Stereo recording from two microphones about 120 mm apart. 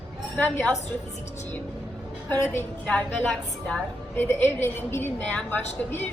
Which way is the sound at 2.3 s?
20° left (ahead or behind).